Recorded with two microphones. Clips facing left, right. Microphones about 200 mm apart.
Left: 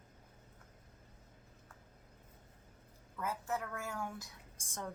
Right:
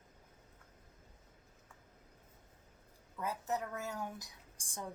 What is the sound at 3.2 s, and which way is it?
A woman's voice, 20° right (ahead or behind).